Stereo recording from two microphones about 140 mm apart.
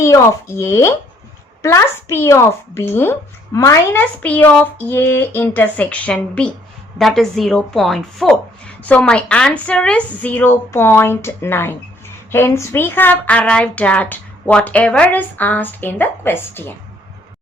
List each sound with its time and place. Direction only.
0.0 s a woman's voice: 20° left (ahead or behind)